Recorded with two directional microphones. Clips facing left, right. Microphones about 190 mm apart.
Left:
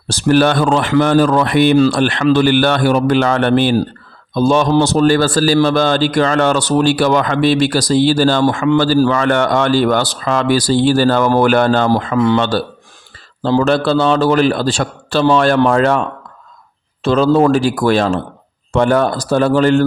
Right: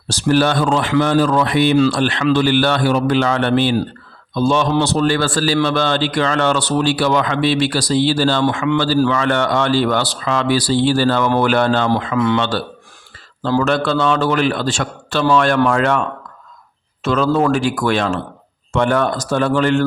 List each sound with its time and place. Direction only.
0.1 s a man's voice: 55° left (ahead or behind); by 19.8 s 35° left (ahead or behind)